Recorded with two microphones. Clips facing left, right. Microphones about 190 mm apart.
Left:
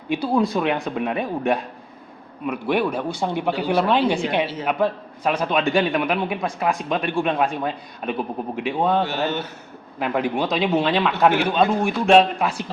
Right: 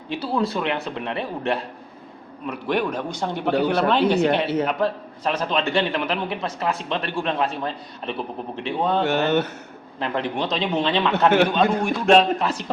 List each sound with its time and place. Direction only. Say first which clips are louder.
0.1 s a man's voice: left 4 dB; 15° left (ahead or behind)
9.0 s speech: right 5 dB; 60° right (ahead or behind)
10.0 s a man's voice: left 3 dB; 10° left (ahead or behind)